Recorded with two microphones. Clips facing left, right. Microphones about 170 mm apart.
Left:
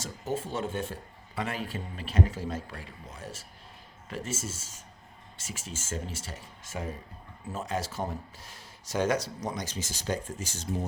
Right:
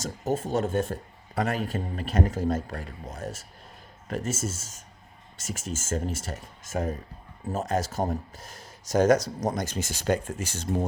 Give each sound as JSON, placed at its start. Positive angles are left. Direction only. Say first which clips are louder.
{"t": 0.0, "sound": "speech", "louder": "right 5 dB", "side_deg": -40}